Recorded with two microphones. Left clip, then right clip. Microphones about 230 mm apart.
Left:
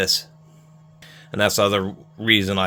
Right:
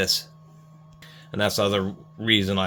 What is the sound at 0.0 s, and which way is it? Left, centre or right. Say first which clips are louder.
Speech: left 3 dB; left.